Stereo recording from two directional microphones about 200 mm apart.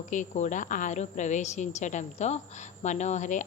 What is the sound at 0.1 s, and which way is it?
A woman's voice, 40° left (ahead or behind).